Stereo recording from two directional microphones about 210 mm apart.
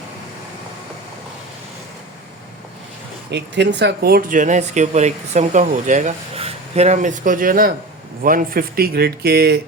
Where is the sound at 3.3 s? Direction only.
55° right (ahead or behind).